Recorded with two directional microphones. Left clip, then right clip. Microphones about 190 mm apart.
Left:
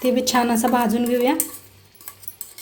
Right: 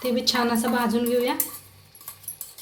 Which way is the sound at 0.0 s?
45° left (ahead or behind).